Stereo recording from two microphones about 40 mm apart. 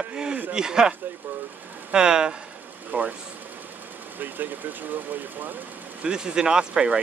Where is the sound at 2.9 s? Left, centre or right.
Right.